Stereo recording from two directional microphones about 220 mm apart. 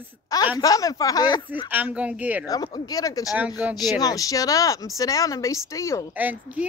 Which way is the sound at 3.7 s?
15° left (ahead or behind).